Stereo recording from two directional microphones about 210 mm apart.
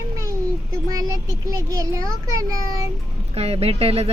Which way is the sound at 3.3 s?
30° right (ahead or behind).